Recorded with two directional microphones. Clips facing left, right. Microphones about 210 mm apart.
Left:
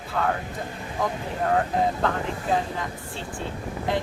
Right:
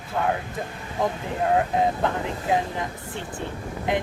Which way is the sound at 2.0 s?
20° right (ahead or behind).